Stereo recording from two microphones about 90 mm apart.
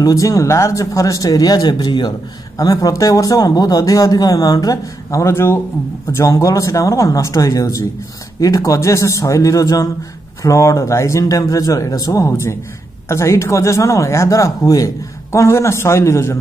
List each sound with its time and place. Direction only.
0.0 s speech: 40° left (ahead or behind); by 2.1 s 55° left (ahead or behind)
2.5 s speech: 40° left (ahead or behind)